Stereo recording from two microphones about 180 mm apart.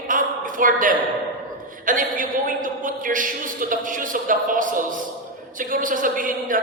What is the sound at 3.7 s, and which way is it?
Speech, 50° right (ahead or behind).